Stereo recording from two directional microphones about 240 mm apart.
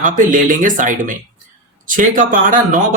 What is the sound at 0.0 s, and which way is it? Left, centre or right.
Speech, right.